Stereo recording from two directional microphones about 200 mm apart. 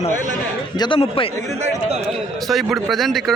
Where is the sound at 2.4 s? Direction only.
Centre (ahead or behind).